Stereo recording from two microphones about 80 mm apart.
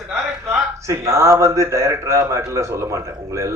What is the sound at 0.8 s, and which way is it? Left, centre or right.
A man's voice, right.